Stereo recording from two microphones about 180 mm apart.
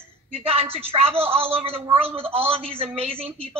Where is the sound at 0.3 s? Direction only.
30° right (ahead or behind).